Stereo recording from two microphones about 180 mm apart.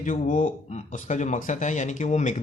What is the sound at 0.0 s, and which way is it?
Speech, 50° left (ahead or behind).